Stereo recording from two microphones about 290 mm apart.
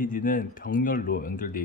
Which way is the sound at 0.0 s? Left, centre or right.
Left.